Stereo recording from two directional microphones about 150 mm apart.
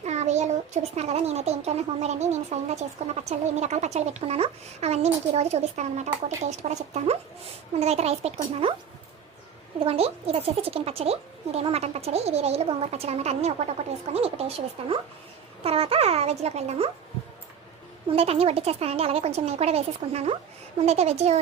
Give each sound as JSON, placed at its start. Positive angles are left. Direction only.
{"t": 0.0, "sound": "a child's voice", "side_deg": -50}
{"t": 9.8, "sound": "speech", "side_deg": -40}
{"t": 18.1, "sound": "speech", "side_deg": -40}